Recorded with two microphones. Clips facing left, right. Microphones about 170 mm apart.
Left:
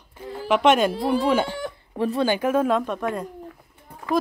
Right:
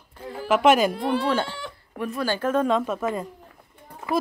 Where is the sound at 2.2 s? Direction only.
15° left (ahead or behind); by 3.2 s centre (ahead or behind).